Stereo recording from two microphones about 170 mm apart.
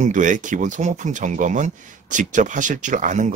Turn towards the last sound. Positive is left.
turn(degrees=-50)  # may be behind; listen again after turning